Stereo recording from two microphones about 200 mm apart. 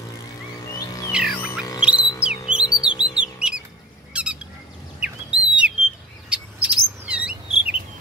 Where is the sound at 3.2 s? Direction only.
5° right (ahead or behind).